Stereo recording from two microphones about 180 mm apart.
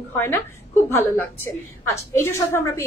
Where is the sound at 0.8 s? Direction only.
15° left (ahead or behind).